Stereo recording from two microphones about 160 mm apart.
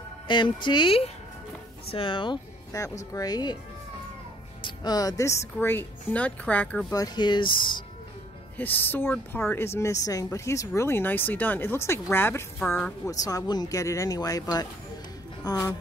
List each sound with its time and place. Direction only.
0.3 s speech: 30° left (ahead or behind)
2.7 s speech: 20° left (ahead or behind)
4.6 s speech: 30° left (ahead or behind); by 6.9 s 10° left (ahead or behind)
6.9 s speech: 25° left (ahead or behind)
8.5 s speech: 10° left (ahead or behind)